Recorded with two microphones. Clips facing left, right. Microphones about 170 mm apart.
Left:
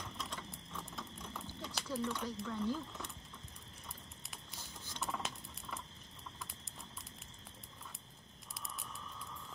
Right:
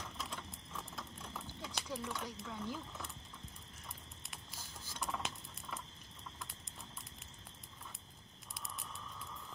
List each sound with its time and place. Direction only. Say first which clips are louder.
0.0 s a sound: even; 5° right (ahead or behind)
0.4 s patter: left 1 dB; centre (ahead or behind)
2.0 s speech: left 8 dB; 5° right (ahead or behind)
4.3 s patter: even; 5° right (ahead or behind)